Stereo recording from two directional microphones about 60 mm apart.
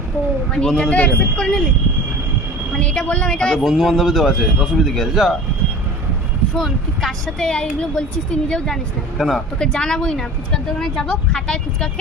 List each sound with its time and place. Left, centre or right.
0.6 s a woman's voice: centre
0.9 s speech: left
2.7 s a woman's voice: centre
3.6 s a man's voice: centre
6.6 s a woman's voice: centre